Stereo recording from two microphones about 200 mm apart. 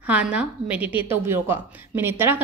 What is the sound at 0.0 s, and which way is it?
A woman's voice, 5° right (ahead or behind).